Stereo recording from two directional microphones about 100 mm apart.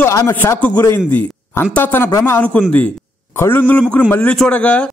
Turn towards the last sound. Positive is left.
turn(degrees=10)  # may be behind; listen again after turning